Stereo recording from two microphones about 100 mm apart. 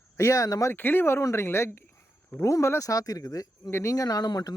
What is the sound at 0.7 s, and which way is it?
Speech, 20° left (ahead or behind).